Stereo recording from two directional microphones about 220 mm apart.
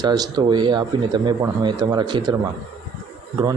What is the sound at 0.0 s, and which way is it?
Speech, 20° right (ahead or behind).